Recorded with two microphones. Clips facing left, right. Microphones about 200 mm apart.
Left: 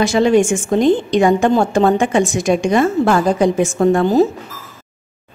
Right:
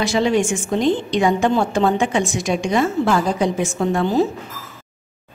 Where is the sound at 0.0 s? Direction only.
50° left (ahead or behind).